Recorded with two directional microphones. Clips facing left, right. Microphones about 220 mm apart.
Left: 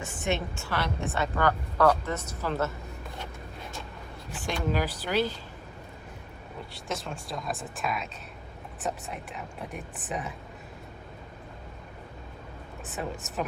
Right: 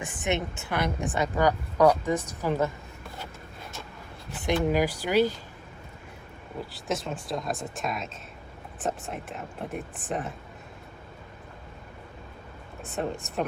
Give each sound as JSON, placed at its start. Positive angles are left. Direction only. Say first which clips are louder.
{"t": 0.0, "sound": "a woman's voice", "louder": "right 1 dB", "side_deg": -20}
{"t": 4.4, "sound": "a woman's voice", "louder": "right 5 dB", "side_deg": -15}
{"t": 6.7, "sound": "speech", "louder": "right 4 dB", "side_deg": 0}
{"t": 12.8, "sound": "speech", "louder": "right 4 dB", "side_deg": 0}